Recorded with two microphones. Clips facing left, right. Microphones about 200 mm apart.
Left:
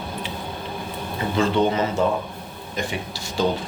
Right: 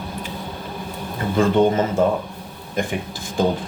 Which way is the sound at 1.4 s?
50° right (ahead or behind).